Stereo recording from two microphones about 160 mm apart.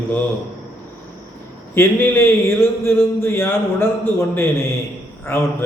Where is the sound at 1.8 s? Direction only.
15° left (ahead or behind).